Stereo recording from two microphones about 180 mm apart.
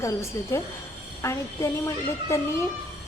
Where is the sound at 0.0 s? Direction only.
15° left (ahead or behind).